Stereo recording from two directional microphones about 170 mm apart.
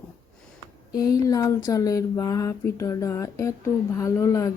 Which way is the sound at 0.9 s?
20° left (ahead or behind).